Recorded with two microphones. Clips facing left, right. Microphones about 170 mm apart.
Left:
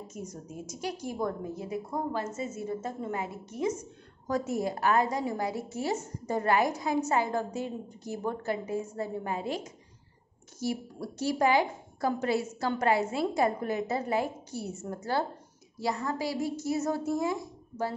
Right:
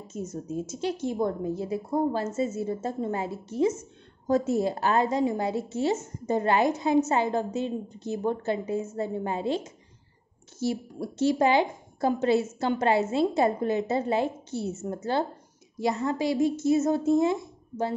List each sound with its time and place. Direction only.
0.1 s a woman's voice: 25° right (ahead or behind)